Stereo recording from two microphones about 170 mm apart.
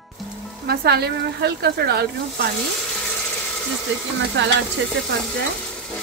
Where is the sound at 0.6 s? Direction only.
70° right (ahead or behind).